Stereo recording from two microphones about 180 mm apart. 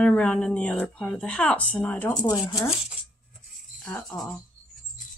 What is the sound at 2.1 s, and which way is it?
Speech, 20° left (ahead or behind).